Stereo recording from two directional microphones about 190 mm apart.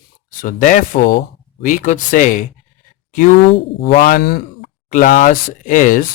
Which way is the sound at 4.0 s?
50° left (ahead or behind).